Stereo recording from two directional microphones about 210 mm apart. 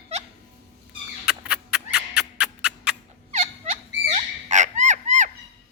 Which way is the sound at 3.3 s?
30° right (ahead or behind).